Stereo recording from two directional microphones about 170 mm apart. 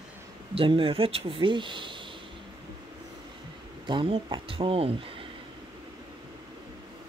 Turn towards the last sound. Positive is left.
turn(degrees=-35)  # may be behind; listen again after turning